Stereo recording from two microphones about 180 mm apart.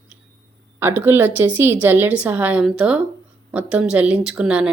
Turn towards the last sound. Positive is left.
turn(degrees=-5)  # may be behind; listen again after turning